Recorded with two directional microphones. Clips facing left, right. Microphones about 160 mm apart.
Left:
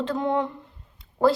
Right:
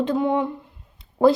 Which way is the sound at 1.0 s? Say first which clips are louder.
Right 4 dB; 15° right (ahead or behind).